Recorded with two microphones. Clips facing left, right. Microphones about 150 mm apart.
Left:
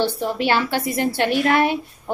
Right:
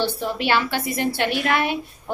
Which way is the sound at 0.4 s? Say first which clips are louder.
Left 2 dB; 35° left (ahead or behind).